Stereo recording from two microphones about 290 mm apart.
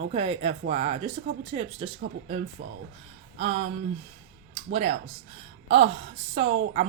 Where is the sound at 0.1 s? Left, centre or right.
Centre.